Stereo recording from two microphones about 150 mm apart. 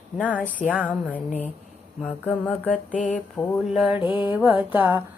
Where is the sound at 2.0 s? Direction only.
5° left (ahead or behind).